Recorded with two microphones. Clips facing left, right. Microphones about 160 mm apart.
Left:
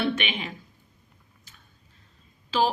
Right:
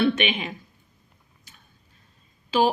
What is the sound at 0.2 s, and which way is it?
Speech, 20° right (ahead or behind).